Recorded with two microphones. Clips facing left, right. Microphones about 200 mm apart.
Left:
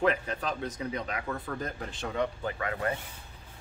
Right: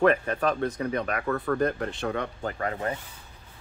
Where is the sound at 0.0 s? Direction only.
60° right (ahead or behind).